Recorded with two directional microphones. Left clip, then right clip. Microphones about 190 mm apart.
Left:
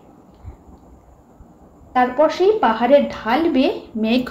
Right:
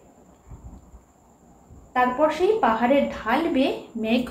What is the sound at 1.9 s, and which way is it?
A woman's voice, 60° left (ahead or behind).